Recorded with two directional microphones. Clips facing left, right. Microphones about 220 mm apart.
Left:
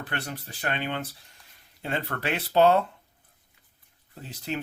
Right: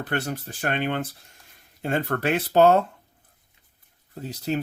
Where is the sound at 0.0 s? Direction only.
45° right (ahead or behind).